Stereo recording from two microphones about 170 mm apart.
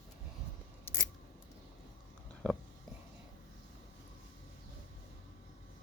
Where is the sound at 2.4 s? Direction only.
5° left (ahead or behind).